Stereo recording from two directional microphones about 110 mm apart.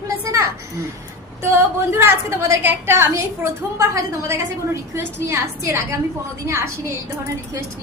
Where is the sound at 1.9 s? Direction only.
20° right (ahead or behind).